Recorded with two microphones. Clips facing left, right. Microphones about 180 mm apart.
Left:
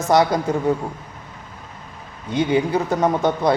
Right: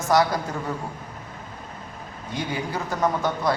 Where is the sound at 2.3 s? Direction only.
20° left (ahead or behind).